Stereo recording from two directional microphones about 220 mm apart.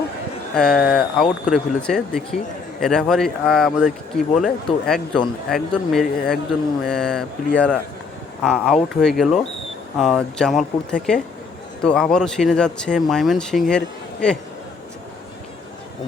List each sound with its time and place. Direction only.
0.5 s speech: centre (ahead or behind)
0.8 s speech: 40° left (ahead or behind)
1.2 s speech: centre (ahead or behind)